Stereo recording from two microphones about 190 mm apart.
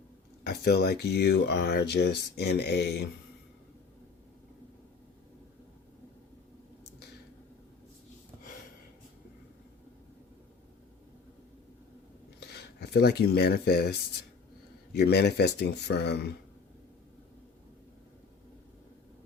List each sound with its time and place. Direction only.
0.4 s speech: 60° left (ahead or behind)
12.5 s speech: 60° left (ahead or behind)
14.9 s speech: 60° left (ahead or behind)